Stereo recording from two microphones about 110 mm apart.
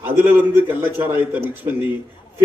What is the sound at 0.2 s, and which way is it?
A man's voice, 15° right (ahead or behind).